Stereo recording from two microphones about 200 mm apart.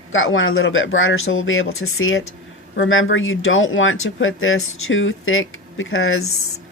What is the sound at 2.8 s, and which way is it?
Speech, 80° left.